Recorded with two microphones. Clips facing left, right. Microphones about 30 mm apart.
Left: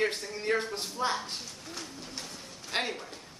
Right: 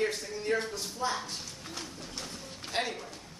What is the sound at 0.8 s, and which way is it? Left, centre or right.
Speech, left.